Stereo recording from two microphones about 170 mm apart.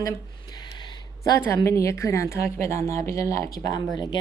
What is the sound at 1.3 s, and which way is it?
A woman's voice, 15° left (ahead or behind).